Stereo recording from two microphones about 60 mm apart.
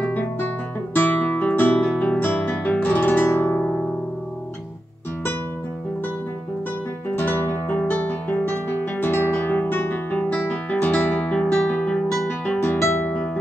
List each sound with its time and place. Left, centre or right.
0.9 s music: left
7.2 s guitar: left
7.9 s music: left
10.3 s guitar: left
12.6 s music: left
13.0 s music: centre